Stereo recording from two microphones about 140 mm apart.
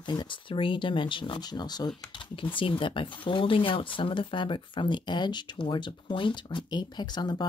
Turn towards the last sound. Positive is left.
turn(degrees=30)  # may be behind; listen again after turning